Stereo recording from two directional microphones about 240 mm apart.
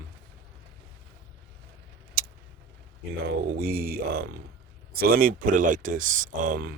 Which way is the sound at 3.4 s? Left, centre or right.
Right.